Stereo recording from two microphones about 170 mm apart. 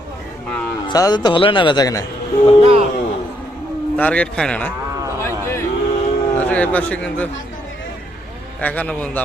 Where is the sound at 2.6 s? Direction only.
35° right (ahead or behind).